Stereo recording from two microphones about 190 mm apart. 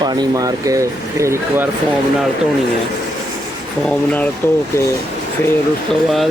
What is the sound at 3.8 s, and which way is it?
Speech, 10° left (ahead or behind).